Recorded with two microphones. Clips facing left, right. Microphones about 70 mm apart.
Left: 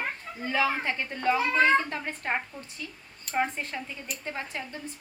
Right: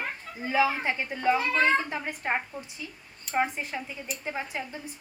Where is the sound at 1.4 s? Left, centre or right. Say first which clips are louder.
Left 2 dB; centre.